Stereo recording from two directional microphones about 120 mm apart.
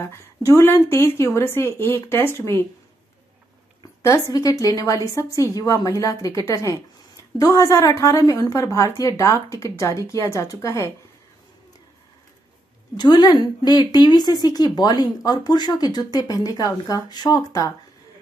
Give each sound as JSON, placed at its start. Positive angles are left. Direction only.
{"t": 0.0, "sound": "a woman's voice", "side_deg": 25}
{"t": 4.0, "sound": "a woman's voice", "side_deg": 25}
{"t": 12.9, "sound": "speech", "side_deg": 35}